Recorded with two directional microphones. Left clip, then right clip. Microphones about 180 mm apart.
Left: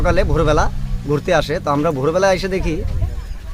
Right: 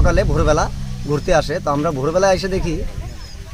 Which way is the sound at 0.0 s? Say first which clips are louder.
Left 1 dB; 10° left (ahead or behind).